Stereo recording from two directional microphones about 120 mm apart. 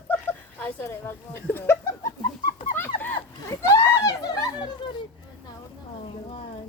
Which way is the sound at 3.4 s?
25° left (ahead or behind).